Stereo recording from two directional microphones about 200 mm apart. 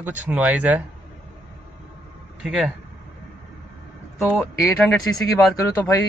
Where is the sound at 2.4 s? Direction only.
Centre (ahead or behind).